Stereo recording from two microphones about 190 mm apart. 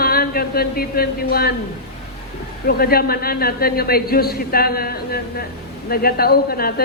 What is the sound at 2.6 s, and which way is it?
A man's voice, 55° left (ahead or behind).